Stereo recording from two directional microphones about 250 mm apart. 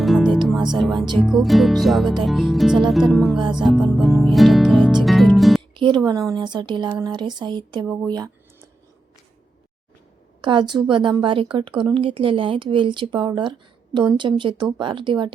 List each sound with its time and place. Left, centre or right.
0.0 s music: centre
0.7 s speech: centre
3.8 s music: centre
5.8 s speech: centre
10.4 s a woman's voice: centre